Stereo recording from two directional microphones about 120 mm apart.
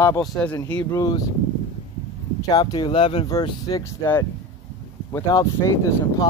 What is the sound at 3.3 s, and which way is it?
Speech, 25° left (ahead or behind).